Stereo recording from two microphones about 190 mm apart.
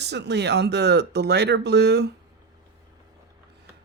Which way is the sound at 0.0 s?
60° right (ahead or behind).